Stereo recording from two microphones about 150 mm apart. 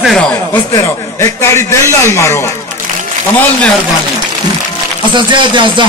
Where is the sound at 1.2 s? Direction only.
20° left (ahead or behind).